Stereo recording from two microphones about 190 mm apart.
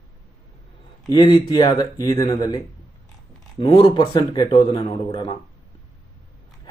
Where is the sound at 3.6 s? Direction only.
30° left (ahead or behind).